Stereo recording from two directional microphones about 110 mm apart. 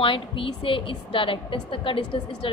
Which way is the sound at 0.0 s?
55° left (ahead or behind).